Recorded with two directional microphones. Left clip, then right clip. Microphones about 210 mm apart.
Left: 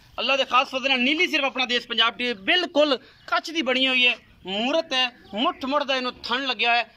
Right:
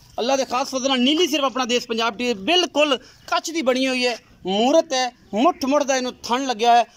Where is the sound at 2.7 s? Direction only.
5° right (ahead or behind).